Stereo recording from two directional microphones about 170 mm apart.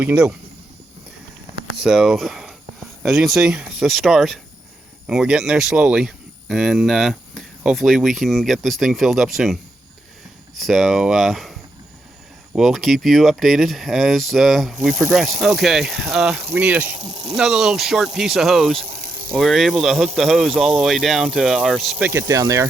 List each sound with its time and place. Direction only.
0.0 s speech: 10° right (ahead or behind)
1.8 s speech: 5° right (ahead or behind)
12.5 s speech: centre (ahead or behind)
19.0 s snake: 60° right (ahead or behind)
19.3 s speech: centre (ahead or behind); by 22.7 s 15° right (ahead or behind)